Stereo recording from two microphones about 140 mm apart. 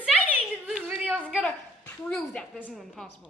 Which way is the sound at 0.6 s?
10° right (ahead or behind).